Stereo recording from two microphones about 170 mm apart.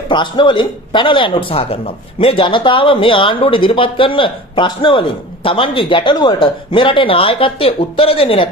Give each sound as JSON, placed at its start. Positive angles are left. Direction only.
{"t": 0.1, "sound": "a man's voice", "side_deg": 30}